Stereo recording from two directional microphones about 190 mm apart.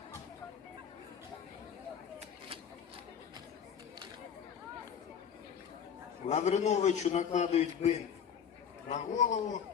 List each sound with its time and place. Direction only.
6.2 s a man's voice: 35° left (ahead or behind)